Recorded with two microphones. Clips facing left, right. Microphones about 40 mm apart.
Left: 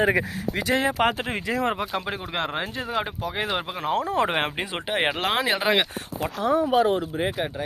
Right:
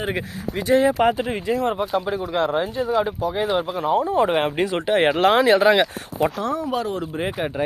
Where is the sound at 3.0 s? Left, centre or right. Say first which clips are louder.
Right 6 dB; left.